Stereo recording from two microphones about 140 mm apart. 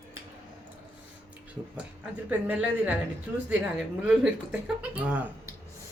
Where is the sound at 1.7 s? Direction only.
10° right (ahead or behind).